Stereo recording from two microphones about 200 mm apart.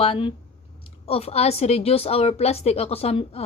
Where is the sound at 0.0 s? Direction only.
25° left (ahead or behind).